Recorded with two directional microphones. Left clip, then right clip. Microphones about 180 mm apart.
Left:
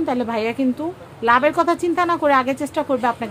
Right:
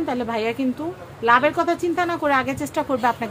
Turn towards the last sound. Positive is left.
turn(degrees=15)  # may be behind; listen again after turning